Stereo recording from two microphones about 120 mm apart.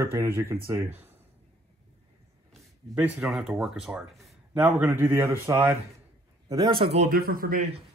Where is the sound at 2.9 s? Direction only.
10° right (ahead or behind).